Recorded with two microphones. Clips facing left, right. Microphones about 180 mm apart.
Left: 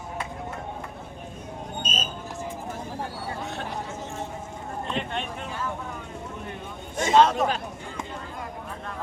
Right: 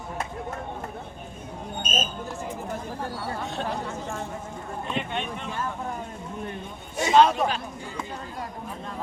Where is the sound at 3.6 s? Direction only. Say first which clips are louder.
Right 3 dB; 60° right (ahead or behind).